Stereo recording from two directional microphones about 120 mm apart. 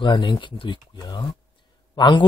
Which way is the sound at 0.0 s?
40° left (ahead or behind).